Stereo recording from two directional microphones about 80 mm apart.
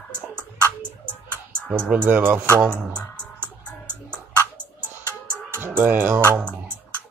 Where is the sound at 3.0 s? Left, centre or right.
Centre.